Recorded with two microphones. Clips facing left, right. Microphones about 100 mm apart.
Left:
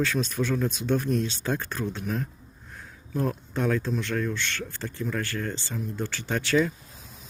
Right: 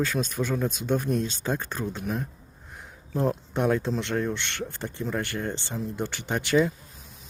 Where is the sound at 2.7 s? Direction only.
15° right (ahead or behind).